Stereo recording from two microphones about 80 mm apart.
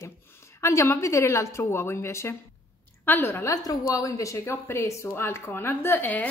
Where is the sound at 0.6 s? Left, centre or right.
Left.